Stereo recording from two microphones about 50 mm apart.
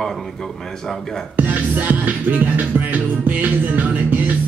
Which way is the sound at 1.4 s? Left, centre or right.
Right.